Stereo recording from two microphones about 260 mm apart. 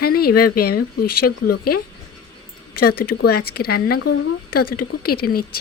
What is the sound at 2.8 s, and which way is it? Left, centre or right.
Speech, left.